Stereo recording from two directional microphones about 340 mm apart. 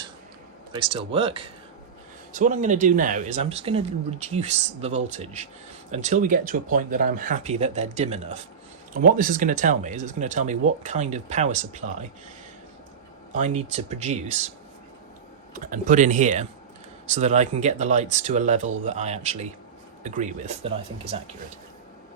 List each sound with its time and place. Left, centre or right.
0.8 s speech: centre
13.3 s speech: right
15.5 s speech: right